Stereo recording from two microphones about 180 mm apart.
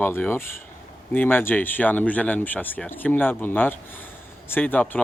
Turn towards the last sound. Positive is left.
turn(degrees=10)  # may be behind; listen again after turning